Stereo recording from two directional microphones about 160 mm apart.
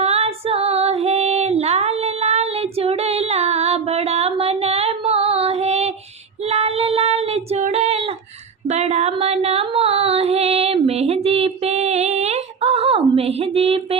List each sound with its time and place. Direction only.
0.0 s female singing: 40° right (ahead or behind)
6.5 s child singing: 40° right (ahead or behind)
7.6 s female singing: 45° right (ahead or behind)
8.6 s a sound: 45° right (ahead or behind)